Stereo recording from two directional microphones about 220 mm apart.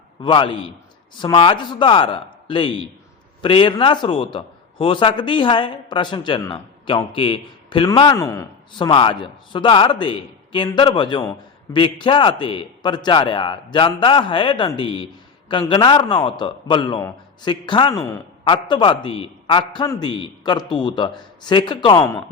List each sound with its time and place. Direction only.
0.2 s a man's voice: 20° left (ahead or behind)